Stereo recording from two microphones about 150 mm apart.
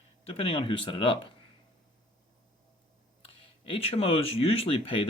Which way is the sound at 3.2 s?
40° left (ahead or behind).